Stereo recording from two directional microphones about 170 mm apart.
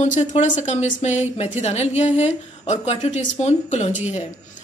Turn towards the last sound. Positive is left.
turn(degrees=40)  # may be behind; listen again after turning